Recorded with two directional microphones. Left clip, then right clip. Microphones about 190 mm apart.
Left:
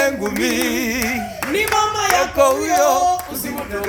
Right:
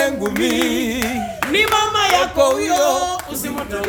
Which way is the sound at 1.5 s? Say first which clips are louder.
Right 2 dB; 20° left (ahead or behind).